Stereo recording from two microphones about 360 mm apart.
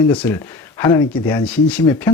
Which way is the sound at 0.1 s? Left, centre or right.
Centre.